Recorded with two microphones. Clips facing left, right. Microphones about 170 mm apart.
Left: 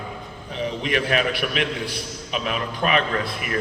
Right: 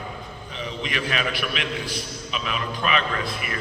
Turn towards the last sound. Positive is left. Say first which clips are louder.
# left 2 dB
turn(degrees=45)  # may be behind; listen again after turning